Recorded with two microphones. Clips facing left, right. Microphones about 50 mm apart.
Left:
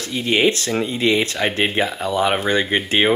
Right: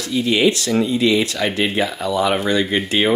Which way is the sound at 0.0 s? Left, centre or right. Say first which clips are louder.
Right 1 dB; left.